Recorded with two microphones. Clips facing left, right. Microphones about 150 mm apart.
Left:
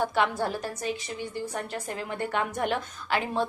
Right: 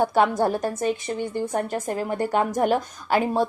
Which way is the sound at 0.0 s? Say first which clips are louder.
Right 6 dB; 45° right (ahead or behind).